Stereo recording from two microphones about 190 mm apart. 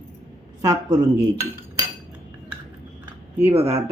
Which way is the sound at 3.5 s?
35° right (ahead or behind).